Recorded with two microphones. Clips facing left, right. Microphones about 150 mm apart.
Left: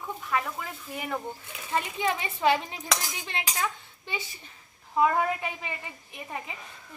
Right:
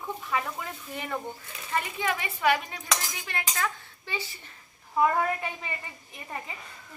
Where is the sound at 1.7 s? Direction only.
20° left (ahead or behind).